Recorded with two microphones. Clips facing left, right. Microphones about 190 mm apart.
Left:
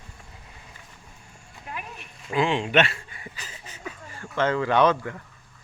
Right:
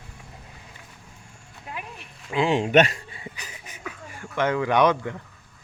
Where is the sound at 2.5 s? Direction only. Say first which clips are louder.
Right 4 dB; 45° right (ahead or behind).